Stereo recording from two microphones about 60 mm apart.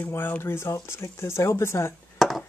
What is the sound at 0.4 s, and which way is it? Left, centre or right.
Speech, left.